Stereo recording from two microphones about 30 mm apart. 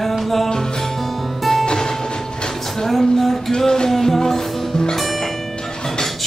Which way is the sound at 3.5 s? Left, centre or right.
Centre.